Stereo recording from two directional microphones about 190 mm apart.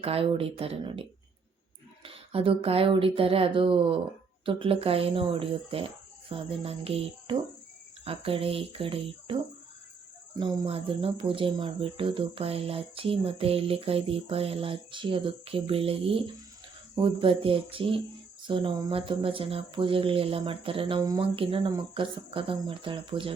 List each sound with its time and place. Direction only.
0.0 s speech: 30° right (ahead or behind)
2.0 s speech: 30° right (ahead or behind)